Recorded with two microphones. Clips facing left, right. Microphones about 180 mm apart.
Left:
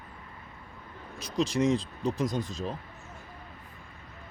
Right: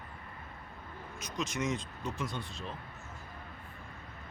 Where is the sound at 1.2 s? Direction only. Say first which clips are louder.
Left 9 dB; 35° left (ahead or behind).